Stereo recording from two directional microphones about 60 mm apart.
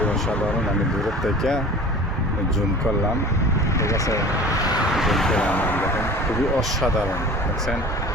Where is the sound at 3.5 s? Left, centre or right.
Left.